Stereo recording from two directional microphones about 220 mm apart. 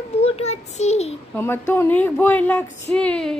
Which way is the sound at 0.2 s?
30° left (ahead or behind).